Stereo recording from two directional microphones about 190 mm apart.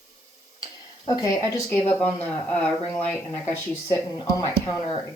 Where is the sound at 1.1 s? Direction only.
20° left (ahead or behind).